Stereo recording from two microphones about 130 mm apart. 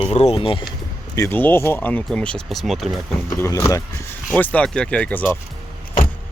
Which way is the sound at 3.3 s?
20° left (ahead or behind).